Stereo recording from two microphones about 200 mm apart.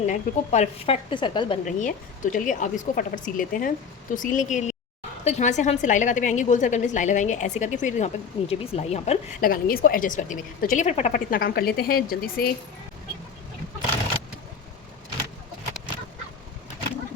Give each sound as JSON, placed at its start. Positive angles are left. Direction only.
{"t": 0.0, "sound": "a woman's voice", "side_deg": 35}
{"t": 1.6, "sound": "a woman's voice", "side_deg": 40}
{"t": 9.4, "sound": "a woman's voice", "side_deg": 45}